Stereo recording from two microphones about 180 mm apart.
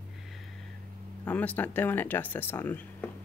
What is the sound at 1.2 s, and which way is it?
Speech, 10° left (ahead or behind).